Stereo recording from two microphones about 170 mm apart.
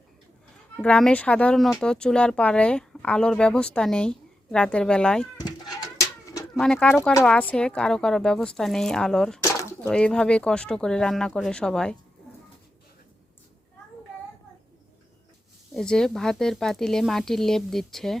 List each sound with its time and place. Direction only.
0.8 s speech: 5° left (ahead or behind)
5.4 s a sound: 20° left (ahead or behind)
6.6 s speech: 5° left (ahead or behind)
9.4 s a sound: 20° left (ahead or behind)
9.8 s speech: 5° left (ahead or behind)
15.7 s speech: 5° left (ahead or behind)